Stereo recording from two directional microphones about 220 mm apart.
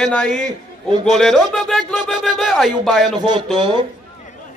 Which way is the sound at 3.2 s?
20° right (ahead or behind).